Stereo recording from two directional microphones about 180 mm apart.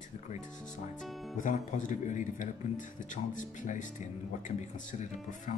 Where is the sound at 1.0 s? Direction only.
Centre (ahead or behind).